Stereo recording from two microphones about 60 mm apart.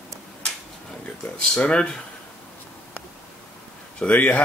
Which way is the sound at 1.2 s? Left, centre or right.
Centre.